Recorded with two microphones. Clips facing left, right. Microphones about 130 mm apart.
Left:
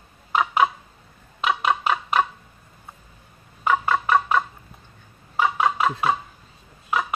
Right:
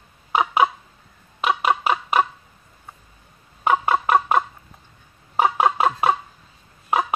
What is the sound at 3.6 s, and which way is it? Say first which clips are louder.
Fowl: right 2 dB; 25° right (ahead or behind).